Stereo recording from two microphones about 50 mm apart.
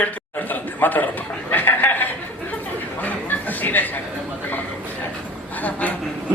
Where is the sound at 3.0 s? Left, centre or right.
Left.